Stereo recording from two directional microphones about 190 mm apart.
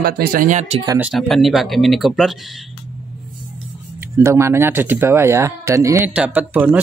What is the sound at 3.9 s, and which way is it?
Speech, 15° right (ahead or behind).